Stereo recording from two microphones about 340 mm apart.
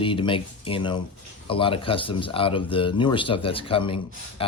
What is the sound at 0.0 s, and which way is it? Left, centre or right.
Speech, centre.